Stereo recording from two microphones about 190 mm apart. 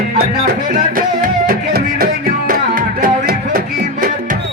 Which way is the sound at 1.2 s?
50° right (ahead or behind).